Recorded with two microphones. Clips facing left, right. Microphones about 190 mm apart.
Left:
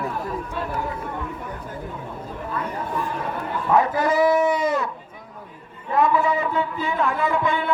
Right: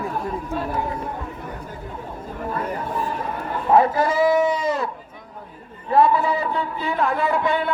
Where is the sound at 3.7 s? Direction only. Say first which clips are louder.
Right 3 dB; 30° right (ahead or behind).